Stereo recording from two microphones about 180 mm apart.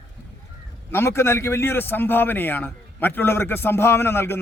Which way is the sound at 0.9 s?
15° left (ahead or behind).